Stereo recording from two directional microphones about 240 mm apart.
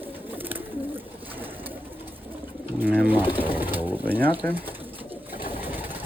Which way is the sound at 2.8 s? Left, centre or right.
Centre.